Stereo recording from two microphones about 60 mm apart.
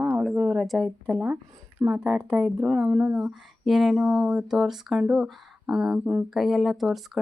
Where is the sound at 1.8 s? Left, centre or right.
Right.